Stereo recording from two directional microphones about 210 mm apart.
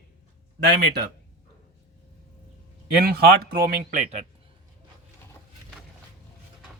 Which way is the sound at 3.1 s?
45° right (ahead or behind).